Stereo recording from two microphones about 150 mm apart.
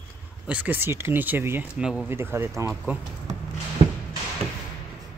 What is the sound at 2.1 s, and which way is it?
Speech, 15° right (ahead or behind).